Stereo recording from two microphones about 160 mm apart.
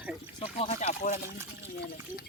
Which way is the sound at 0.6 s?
45° left (ahead or behind).